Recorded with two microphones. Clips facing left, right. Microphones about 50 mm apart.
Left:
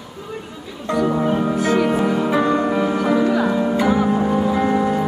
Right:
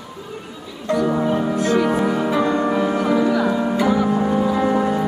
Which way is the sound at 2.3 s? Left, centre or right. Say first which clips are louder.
Left 1 dB; centre.